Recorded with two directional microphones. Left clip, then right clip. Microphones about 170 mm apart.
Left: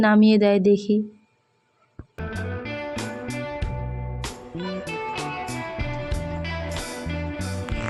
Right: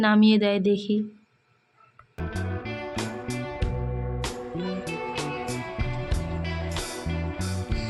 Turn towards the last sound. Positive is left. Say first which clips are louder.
# left 2 dB
turn(degrees=0)  # may be behind; listen again after turning